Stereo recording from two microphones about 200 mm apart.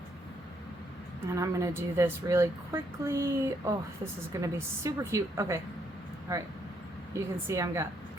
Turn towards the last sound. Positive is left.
turn(degrees=-15)  # may be behind; listen again after turning